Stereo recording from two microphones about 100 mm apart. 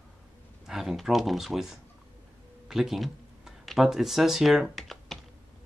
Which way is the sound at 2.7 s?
Centre (ahead or behind).